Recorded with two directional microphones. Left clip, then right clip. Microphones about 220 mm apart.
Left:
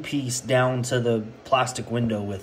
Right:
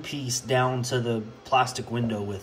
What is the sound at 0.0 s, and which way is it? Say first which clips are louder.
Speech: left 3 dB; 15° right (ahead or behind).